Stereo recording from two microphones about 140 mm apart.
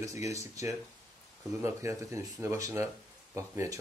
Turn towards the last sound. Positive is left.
turn(degrees=-20)  # may be behind; listen again after turning